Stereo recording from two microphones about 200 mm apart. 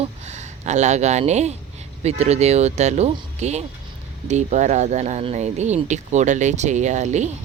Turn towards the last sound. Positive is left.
turn(degrees=-35)  # may be behind; listen again after turning